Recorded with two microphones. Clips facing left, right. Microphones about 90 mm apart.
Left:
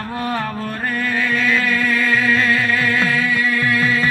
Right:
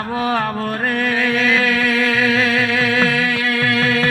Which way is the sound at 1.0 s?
75° right (ahead or behind).